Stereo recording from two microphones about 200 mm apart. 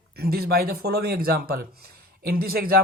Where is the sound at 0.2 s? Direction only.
50° right (ahead or behind).